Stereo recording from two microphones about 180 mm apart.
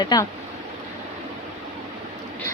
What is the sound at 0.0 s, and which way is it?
Speech, 20° left (ahead or behind).